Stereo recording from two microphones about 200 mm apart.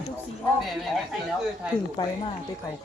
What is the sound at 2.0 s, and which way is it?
Speech, 20° left (ahead or behind).